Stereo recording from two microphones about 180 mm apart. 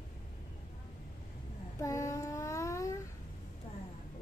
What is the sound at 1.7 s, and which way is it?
Child singing, 15° left (ahead or behind).